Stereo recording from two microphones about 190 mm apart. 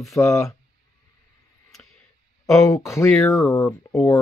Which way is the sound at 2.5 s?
15° left (ahead or behind).